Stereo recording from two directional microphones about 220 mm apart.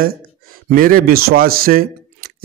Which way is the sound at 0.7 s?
40° right (ahead or behind).